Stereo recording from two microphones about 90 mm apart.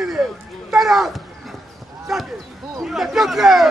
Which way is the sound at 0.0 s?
5° right (ahead or behind).